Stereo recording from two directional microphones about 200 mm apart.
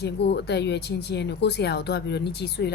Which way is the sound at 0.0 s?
55° left (ahead or behind).